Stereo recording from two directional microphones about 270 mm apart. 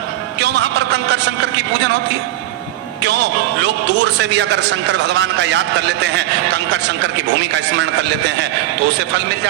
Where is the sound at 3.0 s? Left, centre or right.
Right.